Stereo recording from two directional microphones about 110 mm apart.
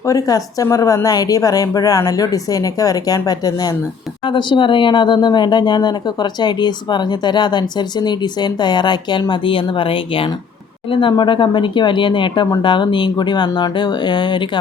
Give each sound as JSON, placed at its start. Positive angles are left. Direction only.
{"t": 0.0, "sound": "a woman's voice", "side_deg": 30}
{"t": 4.3, "sound": "speech", "side_deg": 45}